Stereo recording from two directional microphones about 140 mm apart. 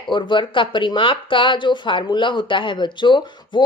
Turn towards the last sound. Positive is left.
turn(degrees=35)  # may be behind; listen again after turning